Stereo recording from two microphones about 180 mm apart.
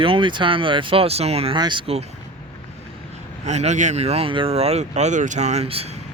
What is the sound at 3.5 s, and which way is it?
Speech, 40° right (ahead or behind).